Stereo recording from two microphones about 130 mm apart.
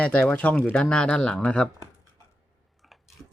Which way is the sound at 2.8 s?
Centre (ahead or behind).